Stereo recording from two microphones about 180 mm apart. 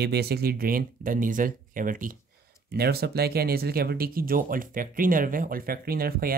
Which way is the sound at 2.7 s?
60° right (ahead or behind).